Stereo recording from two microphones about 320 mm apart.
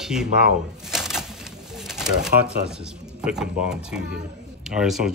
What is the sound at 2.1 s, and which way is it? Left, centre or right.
Speech, right.